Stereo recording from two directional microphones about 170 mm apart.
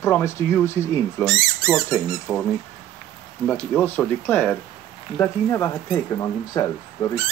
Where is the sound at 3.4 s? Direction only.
10° left (ahead or behind).